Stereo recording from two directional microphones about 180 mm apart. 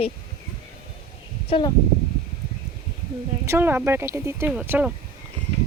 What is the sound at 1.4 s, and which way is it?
Speech, 30° left (ahead or behind).